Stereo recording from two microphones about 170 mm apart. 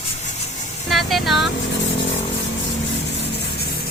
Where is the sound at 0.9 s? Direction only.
Centre (ahead or behind).